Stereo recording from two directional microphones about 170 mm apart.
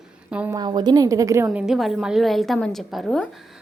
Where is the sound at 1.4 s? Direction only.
Centre (ahead or behind).